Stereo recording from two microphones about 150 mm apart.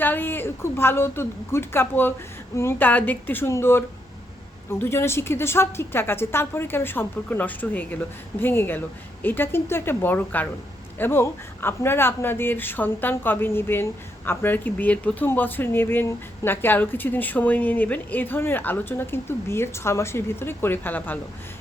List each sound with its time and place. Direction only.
0.0 s speech: 15° left (ahead or behind)